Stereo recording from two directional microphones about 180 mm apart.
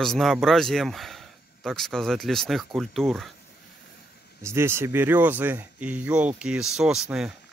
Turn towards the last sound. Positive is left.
turn(degrees=-5)  # may be behind; listen again after turning